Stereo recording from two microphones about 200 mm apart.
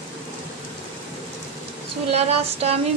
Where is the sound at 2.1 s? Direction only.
30° right (ahead or behind).